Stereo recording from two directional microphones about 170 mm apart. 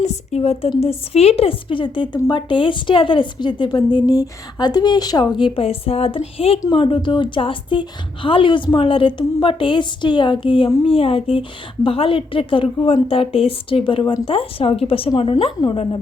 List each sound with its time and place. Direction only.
0.0 s a woman's voice: 40° left (ahead or behind)
2.1 s speech: 20° left (ahead or behind)
2.5 s a woman's voice: 30° left (ahead or behind)